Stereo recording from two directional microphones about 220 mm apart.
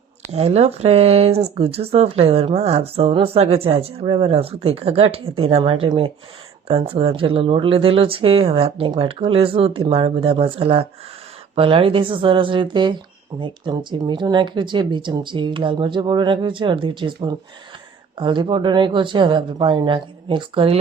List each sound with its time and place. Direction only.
0.3 s speech: 30° right (ahead or behind)
18.2 s speech: 20° right (ahead or behind)